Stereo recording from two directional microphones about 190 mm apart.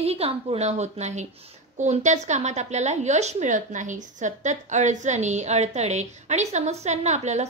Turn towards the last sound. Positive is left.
turn(degrees=-35)  # may be behind; listen again after turning